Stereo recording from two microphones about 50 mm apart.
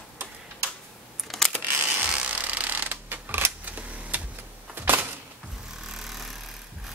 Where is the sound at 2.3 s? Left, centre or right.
Right.